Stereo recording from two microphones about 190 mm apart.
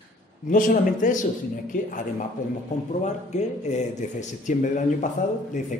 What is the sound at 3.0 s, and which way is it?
A man's voice, 40° left (ahead or behind).